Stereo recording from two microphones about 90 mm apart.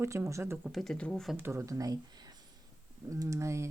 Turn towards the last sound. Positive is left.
turn(degrees=-30)  # may be behind; listen again after turning